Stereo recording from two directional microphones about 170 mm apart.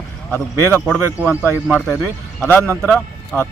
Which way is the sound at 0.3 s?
10° left (ahead or behind).